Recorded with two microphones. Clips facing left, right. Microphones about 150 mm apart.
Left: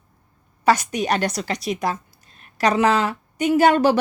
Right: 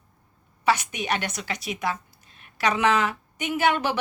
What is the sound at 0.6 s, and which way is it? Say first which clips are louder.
A woman's voice: left 5 dB; 40° left (ahead or behind).